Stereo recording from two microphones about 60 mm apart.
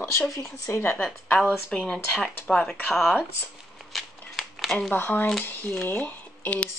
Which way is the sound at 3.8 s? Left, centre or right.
Centre.